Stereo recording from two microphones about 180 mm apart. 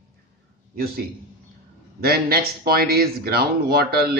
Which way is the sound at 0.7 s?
55° right (ahead or behind).